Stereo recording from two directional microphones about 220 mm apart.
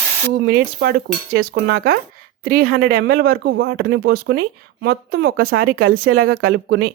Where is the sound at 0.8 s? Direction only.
45° right (ahead or behind).